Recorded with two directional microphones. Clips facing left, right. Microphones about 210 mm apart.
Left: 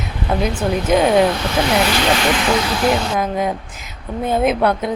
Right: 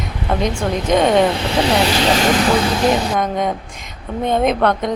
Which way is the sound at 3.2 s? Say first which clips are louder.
Even; 5° left (ahead or behind).